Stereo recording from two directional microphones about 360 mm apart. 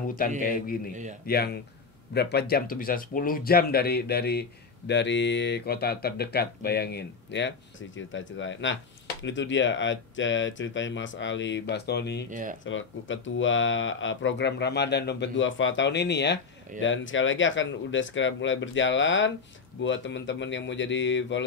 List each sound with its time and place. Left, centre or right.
0.4 s speech: left
12.3 s speech: right
12.6 s speech: left